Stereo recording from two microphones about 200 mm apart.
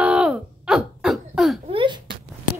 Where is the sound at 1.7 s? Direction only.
25° right (ahead or behind).